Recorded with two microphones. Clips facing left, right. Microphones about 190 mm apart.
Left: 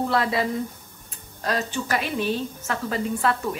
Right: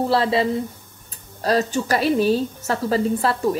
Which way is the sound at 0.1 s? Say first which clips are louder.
Right 4 dB; 30° right (ahead or behind).